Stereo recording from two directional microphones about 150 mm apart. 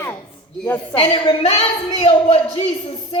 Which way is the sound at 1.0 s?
35° left (ahead or behind).